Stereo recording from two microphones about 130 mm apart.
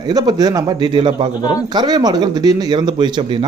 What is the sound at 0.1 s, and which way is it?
A man's voice, 30° right (ahead or behind).